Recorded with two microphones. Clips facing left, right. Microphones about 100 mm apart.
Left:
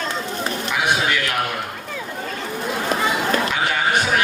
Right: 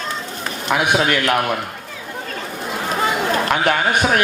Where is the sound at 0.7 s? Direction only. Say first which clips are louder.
Right 5 dB; 55° right (ahead or behind).